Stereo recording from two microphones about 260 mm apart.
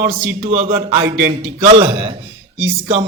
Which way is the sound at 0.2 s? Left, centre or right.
Right.